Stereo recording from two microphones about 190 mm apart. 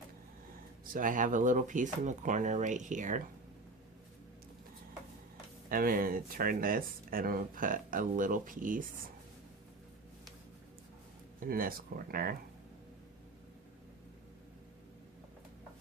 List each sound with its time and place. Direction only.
0.9 s speech: 45° right (ahead or behind)
5.6 s speech: 50° right (ahead or behind)
11.3 s speech: 50° right (ahead or behind)